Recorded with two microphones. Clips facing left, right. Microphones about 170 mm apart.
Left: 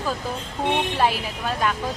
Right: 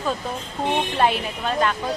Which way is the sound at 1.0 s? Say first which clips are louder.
Right 2 dB; 5° left (ahead or behind).